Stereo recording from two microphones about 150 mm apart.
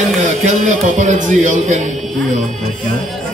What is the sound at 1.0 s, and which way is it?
Speech, 55° right (ahead or behind).